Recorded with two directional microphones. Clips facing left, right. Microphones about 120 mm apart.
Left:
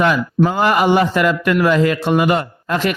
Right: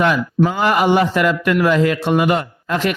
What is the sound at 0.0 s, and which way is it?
A man's voice, 35° left (ahead or behind).